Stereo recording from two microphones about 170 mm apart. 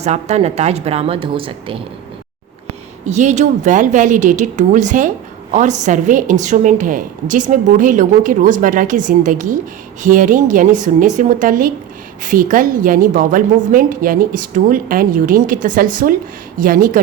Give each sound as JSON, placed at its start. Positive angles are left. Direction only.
{"t": 0.0, "sound": "a woman's voice", "side_deg": -40}
{"t": 3.1, "sound": "speech", "side_deg": -45}